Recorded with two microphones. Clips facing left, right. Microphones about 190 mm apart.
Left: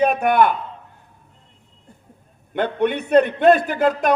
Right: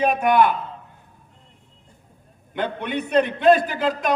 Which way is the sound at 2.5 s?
50° left (ahead or behind).